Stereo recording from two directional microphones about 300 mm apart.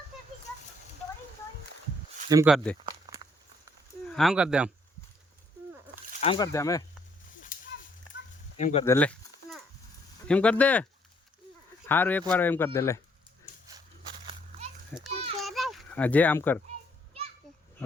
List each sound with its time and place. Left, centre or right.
0.1 s a sound: centre
2.3 s speech: centre
4.0 s speech: centre
6.1 s speech: centre
8.5 s speech: left
8.8 s a sound: centre
10.2 s speech: centre
11.9 s speech: centre
14.9 s children playing: centre
15.4 s a sound: centre